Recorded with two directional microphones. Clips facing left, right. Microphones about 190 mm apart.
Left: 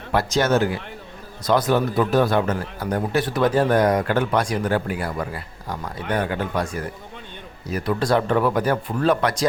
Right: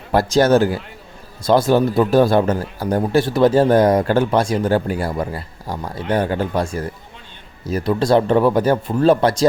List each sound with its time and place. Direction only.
0.1 s speech: 35° right (ahead or behind)